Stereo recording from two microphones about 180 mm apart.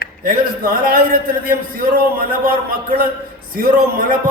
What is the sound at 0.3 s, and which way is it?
A man's voice, 50° right (ahead or behind).